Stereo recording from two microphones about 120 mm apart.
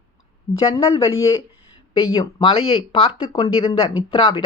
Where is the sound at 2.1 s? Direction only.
45° left (ahead or behind).